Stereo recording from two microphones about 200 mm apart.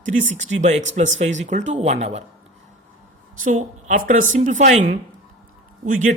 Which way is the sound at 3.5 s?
40° right (ahead or behind).